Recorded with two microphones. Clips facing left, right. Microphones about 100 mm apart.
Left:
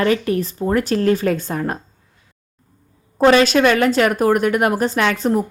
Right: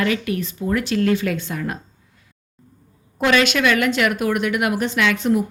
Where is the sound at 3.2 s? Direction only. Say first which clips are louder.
Left 5 dB; 35° left (ahead or behind).